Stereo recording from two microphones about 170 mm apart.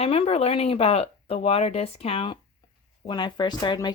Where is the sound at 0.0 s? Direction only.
35° left (ahead or behind).